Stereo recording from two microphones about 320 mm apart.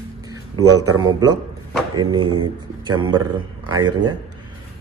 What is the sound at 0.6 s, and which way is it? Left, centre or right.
Speech, right.